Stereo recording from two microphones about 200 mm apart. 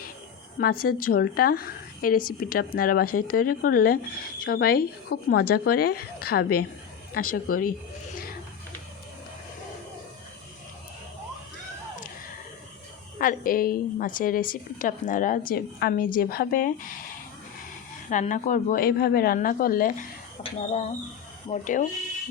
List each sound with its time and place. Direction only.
0.6 s speech: 50° left (ahead or behind)
13.1 s speech: 45° left (ahead or behind)
18.1 s speech: 40° left (ahead or behind)
20.4 s speech: 30° left (ahead or behind)